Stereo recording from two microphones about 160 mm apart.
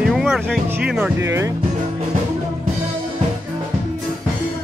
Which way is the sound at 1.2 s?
15° right (ahead or behind).